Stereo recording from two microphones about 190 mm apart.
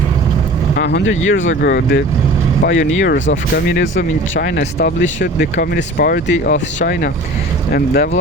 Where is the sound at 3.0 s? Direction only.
75° left (ahead or behind).